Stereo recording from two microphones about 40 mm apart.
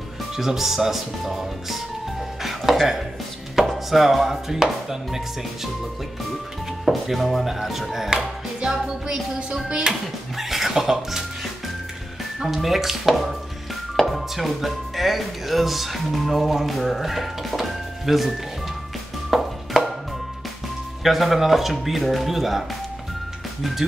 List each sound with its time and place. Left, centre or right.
0.4 s speech: centre
2.4 s music: centre
3.6 s chopping: centre
3.9 s speech: centre
6.8 s speech: centre
8.7 s speech: centre
10.3 s speech: centre
12.6 s speech: centre
19.3 s music: centre
21.0 s speech: centre